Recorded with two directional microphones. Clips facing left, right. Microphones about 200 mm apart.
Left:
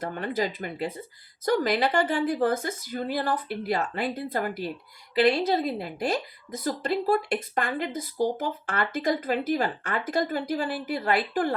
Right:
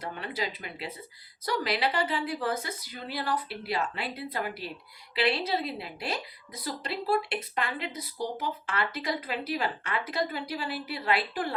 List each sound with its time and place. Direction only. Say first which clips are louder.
0.0 s speech: left 6 dB; 50° left (ahead or behind)